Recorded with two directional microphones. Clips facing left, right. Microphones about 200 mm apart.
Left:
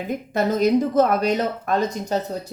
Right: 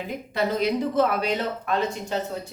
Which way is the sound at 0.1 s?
45° left (ahead or behind).